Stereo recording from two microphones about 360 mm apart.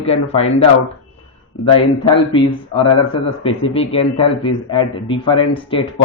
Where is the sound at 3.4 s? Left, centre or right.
Centre.